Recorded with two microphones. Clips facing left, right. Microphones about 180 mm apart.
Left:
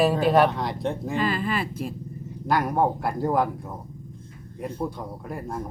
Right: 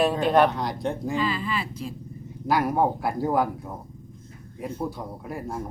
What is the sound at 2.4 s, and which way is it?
Speech, 5° right (ahead or behind).